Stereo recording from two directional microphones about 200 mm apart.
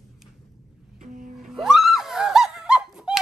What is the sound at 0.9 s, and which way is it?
Music, 40° right (ahead or behind).